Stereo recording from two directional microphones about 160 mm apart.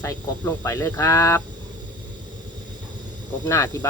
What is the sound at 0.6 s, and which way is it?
Speech, 20° left (ahead or behind).